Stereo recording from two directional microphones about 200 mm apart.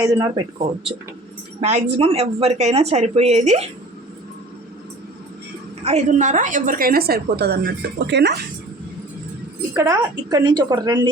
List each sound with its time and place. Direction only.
0.0 s speech: 15° right (ahead or behind)
1.6 s a woman's voice: 30° right (ahead or behind)
5.8 s a woman's voice: 35° right (ahead or behind); by 8.4 s 60° right (ahead or behind)
9.7 s a woman's voice: 20° right (ahead or behind)